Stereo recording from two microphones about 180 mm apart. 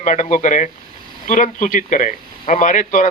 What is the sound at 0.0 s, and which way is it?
Speech, 45° left (ahead or behind).